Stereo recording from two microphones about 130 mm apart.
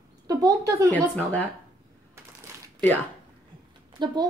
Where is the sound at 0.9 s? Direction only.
10° left (ahead or behind).